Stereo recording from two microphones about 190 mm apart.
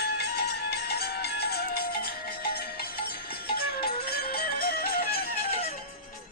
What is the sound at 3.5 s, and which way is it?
Music, 55° left (ahead or behind).